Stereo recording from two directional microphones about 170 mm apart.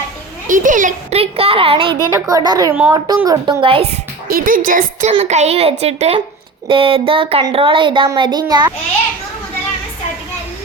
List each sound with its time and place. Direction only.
0.4 s speech: 50° right (ahead or behind)
1.2 s speech: 35° right (ahead or behind)
2.1 s a woman's voice: 20° right (ahead or behind)
3.2 s speech: 30° right (ahead or behind)
4.3 s a woman's voice: 60° right (ahead or behind)
5.1 s a woman's voice: 40° right (ahead or behind)